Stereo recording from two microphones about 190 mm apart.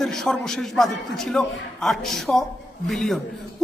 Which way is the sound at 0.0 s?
Centre (ahead or behind).